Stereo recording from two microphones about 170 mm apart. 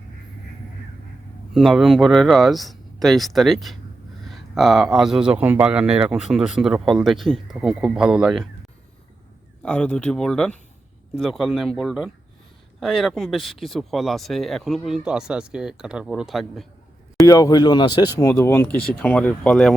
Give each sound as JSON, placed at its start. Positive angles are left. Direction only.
{"t": 1.5, "sound": "speech", "side_deg": 0}
{"t": 9.6, "sound": "speech", "side_deg": 5}
{"t": 17.2, "sound": "speech", "side_deg": 20}